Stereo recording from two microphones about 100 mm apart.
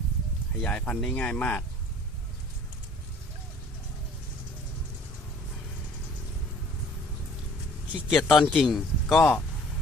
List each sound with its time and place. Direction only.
0.6 s speech: 10° left (ahead or behind)
8.1 s speech: centre (ahead or behind)